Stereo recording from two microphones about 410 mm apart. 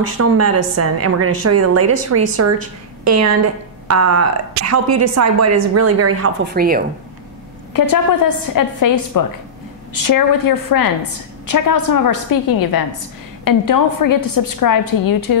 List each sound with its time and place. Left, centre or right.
0.2 s a woman's voice: right
6.5 s a woman's voice: right
7.7 s a woman's voice: left